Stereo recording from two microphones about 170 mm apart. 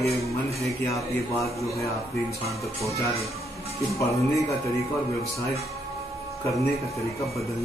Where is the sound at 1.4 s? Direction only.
Centre (ahead or behind).